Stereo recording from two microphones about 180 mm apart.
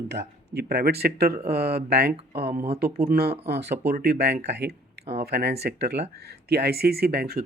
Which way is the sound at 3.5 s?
65° right (ahead or behind).